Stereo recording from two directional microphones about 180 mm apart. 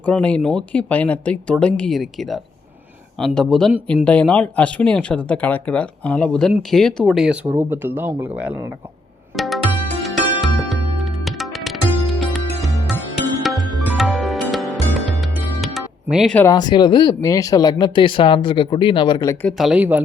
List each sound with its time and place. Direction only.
0.0 s speech: 5° left (ahead or behind); by 8.5 s 10° right (ahead or behind)
9.3 s music: centre (ahead or behind)
16.3 s speech: 10° left (ahead or behind)
16.6 s speech: 25° left (ahead or behind)
19.5 s speech: centre (ahead or behind)